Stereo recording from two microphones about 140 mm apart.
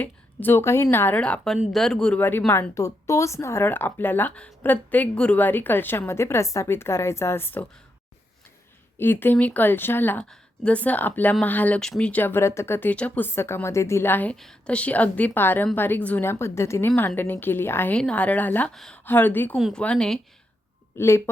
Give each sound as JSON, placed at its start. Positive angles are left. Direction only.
{"t": 0.0, "sound": "speech", "side_deg": 15}
{"t": 9.0, "sound": "speech", "side_deg": 15}
{"t": 19.0, "sound": "speech", "side_deg": 15}
{"t": 19.5, "sound": "speech", "side_deg": 0}
{"t": 20.9, "sound": "speech", "side_deg": 20}